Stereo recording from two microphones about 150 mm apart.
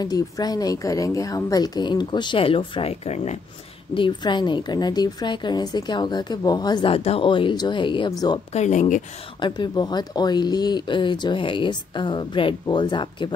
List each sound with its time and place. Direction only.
0.0 s a woman's voice: 25° left (ahead or behind); by 3.3 s 45° left (ahead or behind)
3.9 s a woman's voice: 30° left (ahead or behind)
8.5 s speech: 50° left (ahead or behind)
9.4 s speech: 30° left (ahead or behind)